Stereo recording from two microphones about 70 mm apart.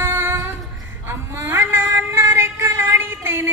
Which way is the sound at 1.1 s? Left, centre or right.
Right.